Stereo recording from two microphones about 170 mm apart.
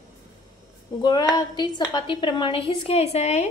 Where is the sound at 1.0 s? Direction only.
25° left (ahead or behind).